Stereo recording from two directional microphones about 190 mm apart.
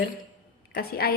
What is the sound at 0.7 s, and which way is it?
Speech, 55° left (ahead or behind).